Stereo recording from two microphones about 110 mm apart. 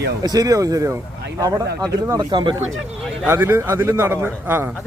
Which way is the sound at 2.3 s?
45° right (ahead or behind).